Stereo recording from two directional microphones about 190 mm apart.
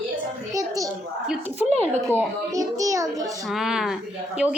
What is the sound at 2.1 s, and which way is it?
A child's voice, 15° right (ahead or behind).